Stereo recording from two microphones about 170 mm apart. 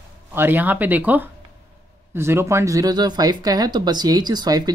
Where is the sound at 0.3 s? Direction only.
10° right (ahead or behind).